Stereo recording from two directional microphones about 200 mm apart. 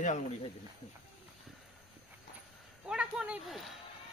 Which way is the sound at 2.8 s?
5° right (ahead or behind).